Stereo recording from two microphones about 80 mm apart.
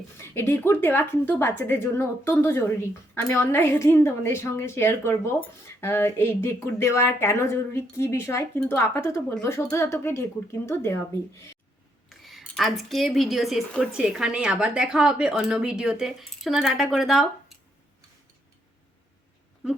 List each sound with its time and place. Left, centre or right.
0.2 s a woman's voice: left
12.0 s a sound: centre
12.4 s speech: centre
13.7 s a woman's voice: centre
13.9 s a woman's voice: centre